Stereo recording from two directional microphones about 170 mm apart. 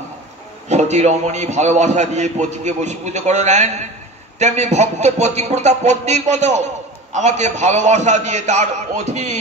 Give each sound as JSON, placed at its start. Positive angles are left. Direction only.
{"t": 0.7, "sound": "a man's voice", "side_deg": -40}